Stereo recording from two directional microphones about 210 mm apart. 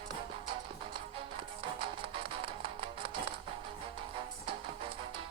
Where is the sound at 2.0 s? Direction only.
25° right (ahead or behind).